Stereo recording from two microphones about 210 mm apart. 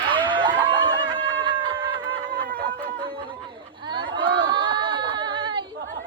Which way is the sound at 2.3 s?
45° right (ahead or behind).